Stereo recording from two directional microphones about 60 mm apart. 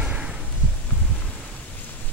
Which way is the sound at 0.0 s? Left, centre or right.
Centre.